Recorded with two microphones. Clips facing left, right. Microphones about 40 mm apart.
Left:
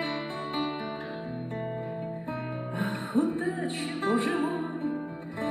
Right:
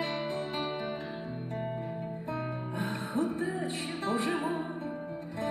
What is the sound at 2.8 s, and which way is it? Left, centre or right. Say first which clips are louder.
Music: left 5 dB; left.